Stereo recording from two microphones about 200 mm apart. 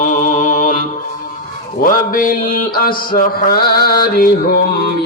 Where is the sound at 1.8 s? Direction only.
45° left (ahead or behind).